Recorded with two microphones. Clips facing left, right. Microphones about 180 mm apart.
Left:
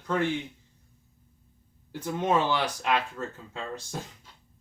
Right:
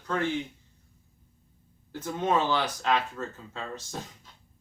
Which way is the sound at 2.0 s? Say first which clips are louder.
Left 1 dB; 10° left (ahead or behind).